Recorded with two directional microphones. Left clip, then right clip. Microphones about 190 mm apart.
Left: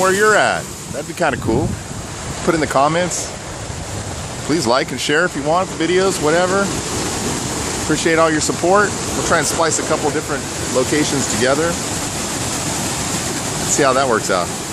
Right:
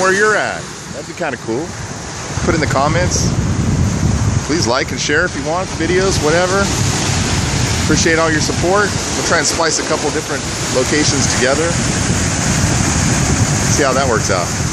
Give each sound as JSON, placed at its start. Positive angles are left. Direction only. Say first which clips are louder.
{"t": 0.0, "sound": "speech", "louder": "right 2 dB", "side_deg": 0}
{"t": 0.3, "sound": "speech", "louder": "left 2 dB", "side_deg": 20}
{"t": 2.6, "sound": "speech", "louder": "left 1 dB", "side_deg": 5}
{"t": 4.5, "sound": "speech", "louder": "even", "side_deg": 5}
{"t": 6.2, "sound": "speech", "louder": "right 1 dB", "side_deg": 0}
{"t": 7.9, "sound": "speech", "louder": "right 1 dB", "side_deg": 0}
{"t": 13.7, "sound": "speech", "louder": "left 1 dB", "side_deg": 5}